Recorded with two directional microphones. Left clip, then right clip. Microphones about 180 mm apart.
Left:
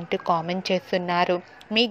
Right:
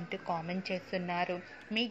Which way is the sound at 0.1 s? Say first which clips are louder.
Left 13 dB; 30° left (ahead or behind).